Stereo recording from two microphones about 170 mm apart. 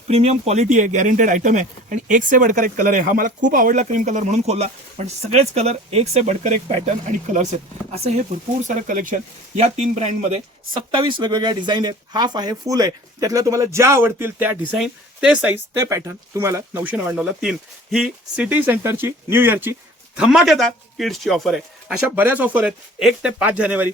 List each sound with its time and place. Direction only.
0.1 s speech: 35° right (ahead or behind)
8.6 s speech: 50° right (ahead or behind)
10.9 s a man's voice: 25° right (ahead or behind); by 23.9 s 10° right (ahead or behind)